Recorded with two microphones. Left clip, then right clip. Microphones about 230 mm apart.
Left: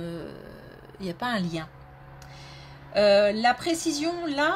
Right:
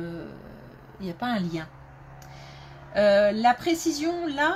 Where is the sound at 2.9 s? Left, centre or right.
Left.